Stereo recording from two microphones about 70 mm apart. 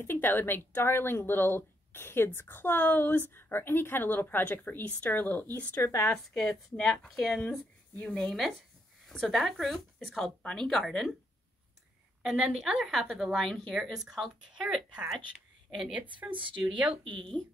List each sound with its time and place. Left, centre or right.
0.0 s speech: left
5.8 s speech: left
6.2 s speech: centre
7.3 s speech: centre
12.2 s speech: centre
15.9 s speech: right